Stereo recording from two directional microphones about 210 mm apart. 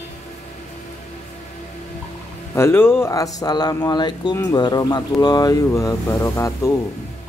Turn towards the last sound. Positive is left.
turn(degrees=15)  # may be behind; listen again after turning